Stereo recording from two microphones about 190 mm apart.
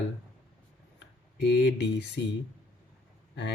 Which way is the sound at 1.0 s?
65° left (ahead or behind).